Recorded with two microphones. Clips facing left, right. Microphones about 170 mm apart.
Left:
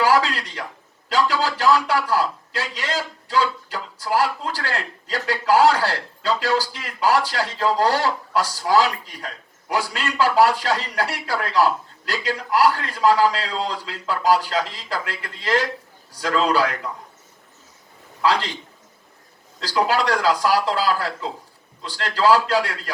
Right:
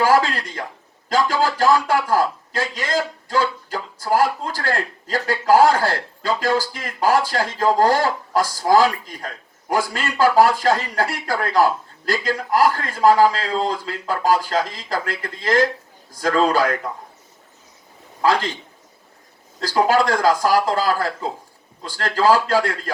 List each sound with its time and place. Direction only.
0.0 s speech: 45° right (ahead or behind)
18.2 s a man's voice: 50° right (ahead or behind)
19.5 s speech: 45° right (ahead or behind)